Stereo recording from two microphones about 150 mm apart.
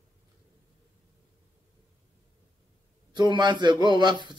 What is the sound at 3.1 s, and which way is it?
A man's voice, 30° right (ahead or behind).